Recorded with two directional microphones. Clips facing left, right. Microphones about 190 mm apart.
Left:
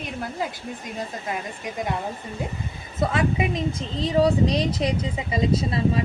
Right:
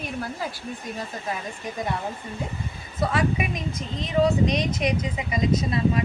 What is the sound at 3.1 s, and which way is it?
A woman's voice, 25° left (ahead or behind).